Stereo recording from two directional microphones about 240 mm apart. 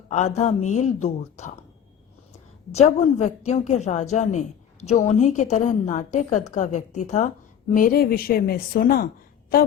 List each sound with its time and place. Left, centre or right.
0.1 s a woman's voice: left
2.7 s a woman's voice: left